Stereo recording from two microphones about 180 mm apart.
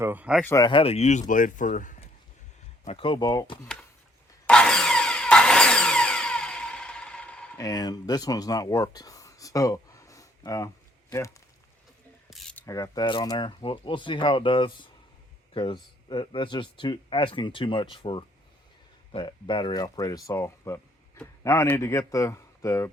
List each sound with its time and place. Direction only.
0.0 s speech: 10° right (ahead or behind)
0.4 s speech: 20° left (ahead or behind); by 1.2 s 35° left (ahead or behind)
1.3 s speech: 45° left (ahead or behind)
2.8 s speech: 30° left (ahead or behind)
4.4 s a sound: 5° left (ahead or behind)
7.6 s speech: 20° left (ahead or behind)
12.3 s mechanisms: 5° left (ahead or behind)
12.6 s speech: 20° left (ahead or behind)